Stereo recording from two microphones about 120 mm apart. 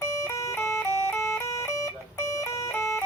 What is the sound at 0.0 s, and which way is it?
Music, 25° left (ahead or behind).